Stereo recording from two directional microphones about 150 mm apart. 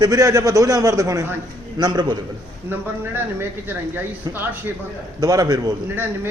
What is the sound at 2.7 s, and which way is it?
A man's voice, 15° right (ahead or behind).